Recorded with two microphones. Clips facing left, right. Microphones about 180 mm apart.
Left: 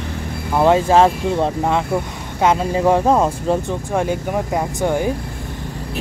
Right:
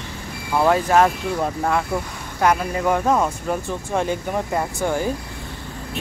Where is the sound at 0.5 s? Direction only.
25° left (ahead or behind).